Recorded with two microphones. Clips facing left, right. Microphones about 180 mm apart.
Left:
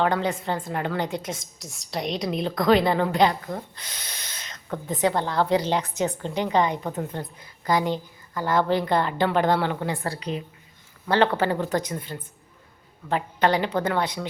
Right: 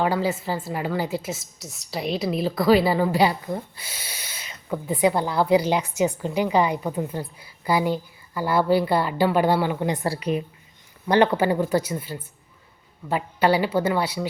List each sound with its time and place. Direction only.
0.0 s a woman's voice: 5° right (ahead or behind)
9.9 s a woman's voice: 20° right (ahead or behind)